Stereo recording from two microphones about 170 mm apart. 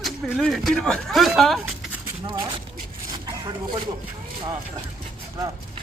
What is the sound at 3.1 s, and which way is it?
Zipper, 25° right (ahead or behind).